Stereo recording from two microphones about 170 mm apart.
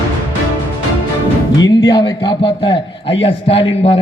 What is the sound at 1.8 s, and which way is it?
A man's voice, 25° left (ahead or behind).